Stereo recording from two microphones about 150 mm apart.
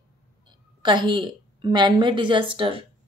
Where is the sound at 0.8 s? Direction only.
30° right (ahead or behind).